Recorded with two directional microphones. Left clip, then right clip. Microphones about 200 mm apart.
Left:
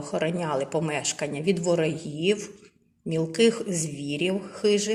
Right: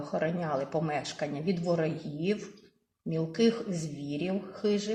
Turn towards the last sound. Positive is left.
turn(degrees=15)  # may be behind; listen again after turning